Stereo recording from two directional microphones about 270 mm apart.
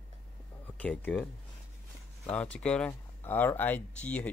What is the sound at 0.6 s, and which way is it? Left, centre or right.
Speech, centre.